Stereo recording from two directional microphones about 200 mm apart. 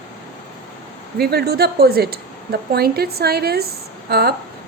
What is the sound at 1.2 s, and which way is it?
A woman's voice, 50° right (ahead or behind).